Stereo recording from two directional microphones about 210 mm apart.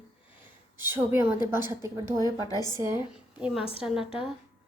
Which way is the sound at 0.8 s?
10° right (ahead or behind).